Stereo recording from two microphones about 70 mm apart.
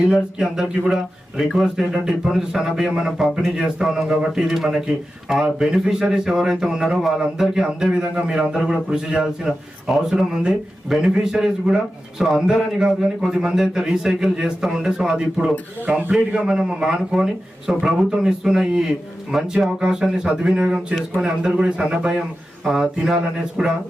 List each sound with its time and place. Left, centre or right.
0.1 s speech: centre
15.9 s a man's voice: right
16.1 s speech: centre